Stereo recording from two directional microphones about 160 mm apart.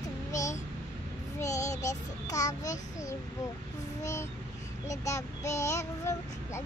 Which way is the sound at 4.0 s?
20° left (ahead or behind).